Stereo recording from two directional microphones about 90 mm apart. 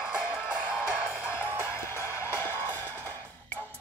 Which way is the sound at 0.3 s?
25° left (ahead or behind).